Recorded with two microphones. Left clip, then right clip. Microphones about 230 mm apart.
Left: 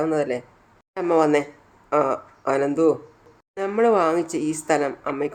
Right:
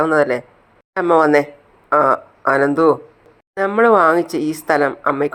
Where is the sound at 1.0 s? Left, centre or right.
Centre.